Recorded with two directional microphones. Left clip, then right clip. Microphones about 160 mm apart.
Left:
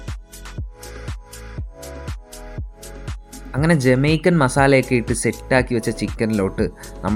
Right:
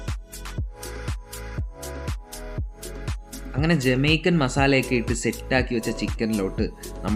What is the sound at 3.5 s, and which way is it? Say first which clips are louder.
Speech: left 6 dB; 25° left (ahead or behind).